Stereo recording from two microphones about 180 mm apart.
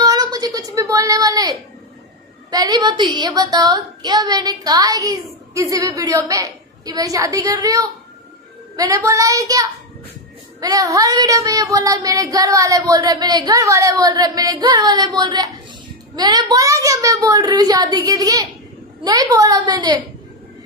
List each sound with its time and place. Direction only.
0.0 s a sound: 20° right (ahead or behind)
2.5 s child singing: 20° right (ahead or behind)
8.7 s speech: 20° right (ahead or behind)
10.6 s child singing: 20° right (ahead or behind)